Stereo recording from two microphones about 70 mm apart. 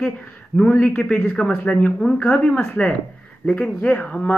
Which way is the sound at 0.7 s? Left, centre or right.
Left.